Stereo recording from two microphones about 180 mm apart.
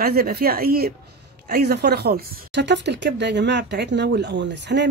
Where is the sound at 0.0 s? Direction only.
55° right (ahead or behind).